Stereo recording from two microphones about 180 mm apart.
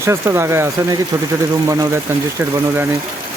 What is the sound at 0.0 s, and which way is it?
Speech, 15° right (ahead or behind).